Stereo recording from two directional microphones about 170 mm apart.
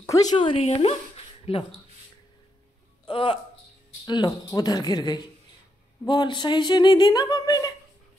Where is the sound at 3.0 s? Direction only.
30° left (ahead or behind).